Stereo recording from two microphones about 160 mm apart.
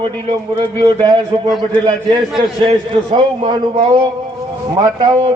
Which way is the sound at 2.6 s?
30° right (ahead or behind).